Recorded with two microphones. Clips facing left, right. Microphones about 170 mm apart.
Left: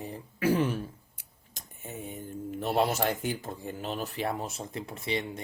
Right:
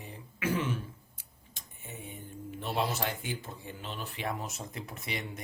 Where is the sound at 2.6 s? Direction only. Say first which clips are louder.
Left 5 dB; 45° left (ahead or behind); by 5.2 s 30° left (ahead or behind).